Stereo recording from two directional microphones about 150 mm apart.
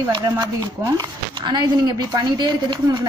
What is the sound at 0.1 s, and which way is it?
Speech, 25° right (ahead or behind).